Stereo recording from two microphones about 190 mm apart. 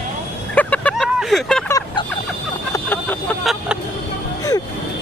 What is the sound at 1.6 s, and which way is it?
Vehicle, 20° left (ahead or behind).